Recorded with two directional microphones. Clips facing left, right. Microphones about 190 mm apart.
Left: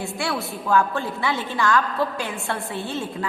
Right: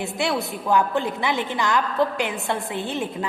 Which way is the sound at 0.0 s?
20° right (ahead or behind).